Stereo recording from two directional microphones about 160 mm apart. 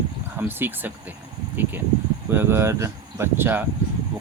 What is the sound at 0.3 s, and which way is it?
Speech, 15° right (ahead or behind).